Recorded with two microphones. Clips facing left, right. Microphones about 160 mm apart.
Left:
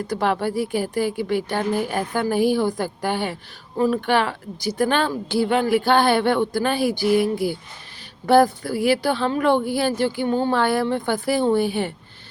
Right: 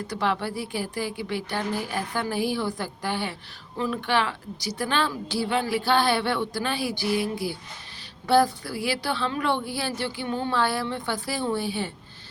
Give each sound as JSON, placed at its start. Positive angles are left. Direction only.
{"t": 0.1, "sound": "a woman's voice", "side_deg": 45}